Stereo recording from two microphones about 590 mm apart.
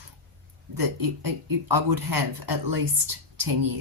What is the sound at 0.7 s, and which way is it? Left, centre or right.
Speech, right.